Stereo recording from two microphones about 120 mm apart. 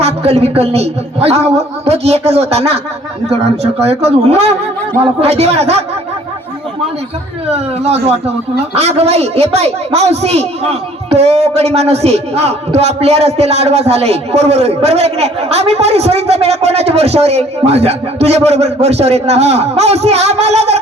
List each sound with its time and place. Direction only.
0.0 s a woman's voice: 60° right (ahead or behind)
7.5 s a woman's voice: 60° right (ahead or behind)